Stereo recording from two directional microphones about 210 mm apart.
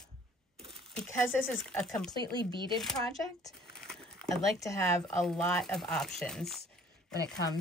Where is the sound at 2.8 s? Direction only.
Centre (ahead or behind).